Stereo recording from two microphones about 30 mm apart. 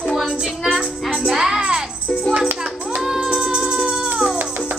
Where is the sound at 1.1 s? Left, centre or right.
Centre.